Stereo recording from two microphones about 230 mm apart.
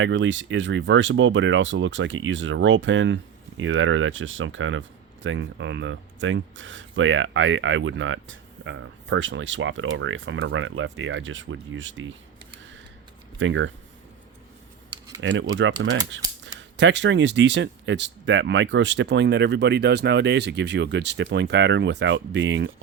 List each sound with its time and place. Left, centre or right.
0.0 s speech: right
13.4 s speech: right
15.2 s speech: right